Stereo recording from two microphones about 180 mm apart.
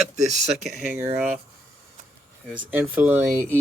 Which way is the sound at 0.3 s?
5° right (ahead or behind).